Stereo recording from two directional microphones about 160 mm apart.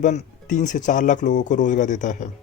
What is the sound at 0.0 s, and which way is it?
Speech, 50° left (ahead or behind).